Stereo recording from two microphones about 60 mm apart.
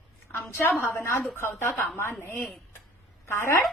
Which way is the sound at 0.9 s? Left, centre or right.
Left.